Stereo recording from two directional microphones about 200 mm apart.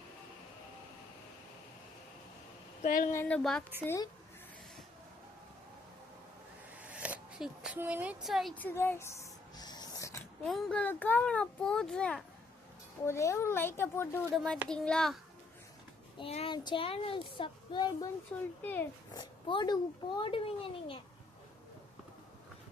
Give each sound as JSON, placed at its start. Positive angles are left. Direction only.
{"t": 2.8, "sound": "speech", "side_deg": 45}
{"t": 3.1, "sound": "speech", "side_deg": 10}
{"t": 3.8, "sound": "speech", "side_deg": 15}
{"t": 6.8, "sound": "a sound", "side_deg": -5}
{"t": 10.4, "sound": "a child's voice", "side_deg": 5}
{"t": 13.1, "sound": "a child's voice", "side_deg": 15}
{"t": 16.1, "sound": "speech", "side_deg": 30}
{"t": 18.6, "sound": "speech", "side_deg": 10}
{"t": 19.1, "sound": "speech", "side_deg": 20}